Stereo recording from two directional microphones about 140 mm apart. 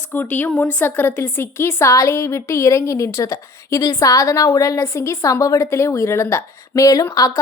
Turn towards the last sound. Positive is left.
turn(degrees=25)  # may be behind; listen again after turning